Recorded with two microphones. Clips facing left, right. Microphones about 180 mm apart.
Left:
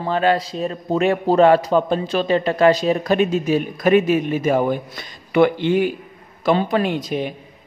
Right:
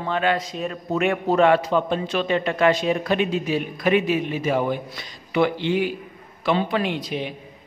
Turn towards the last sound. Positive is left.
turn(degrees=45)  # may be behind; listen again after turning